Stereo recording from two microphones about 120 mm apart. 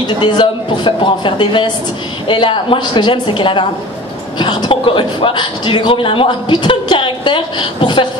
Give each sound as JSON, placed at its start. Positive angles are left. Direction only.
{"t": 0.0, "sound": "a man's voice", "side_deg": 40}